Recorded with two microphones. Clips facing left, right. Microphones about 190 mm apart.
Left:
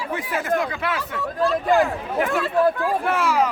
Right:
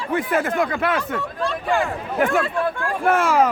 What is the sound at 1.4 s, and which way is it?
Speech, centre (ahead or behind).